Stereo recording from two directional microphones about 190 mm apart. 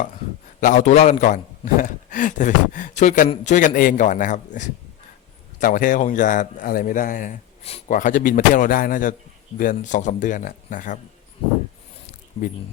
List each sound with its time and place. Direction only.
0.6 s a man's voice: 40° left (ahead or behind)